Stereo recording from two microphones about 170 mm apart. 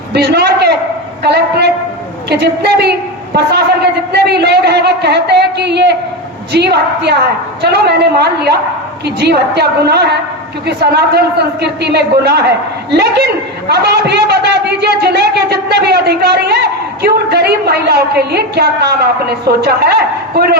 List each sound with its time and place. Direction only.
0.1 s a sound: 70° right (ahead or behind)
1.2 s a man's voice: 75° right (ahead or behind)
4.1 s a man's voice: 75° right (ahead or behind)
13.7 s a man's voice: 75° right (ahead or behind)